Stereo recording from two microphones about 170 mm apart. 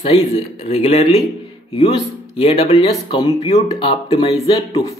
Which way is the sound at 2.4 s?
35° left (ahead or behind).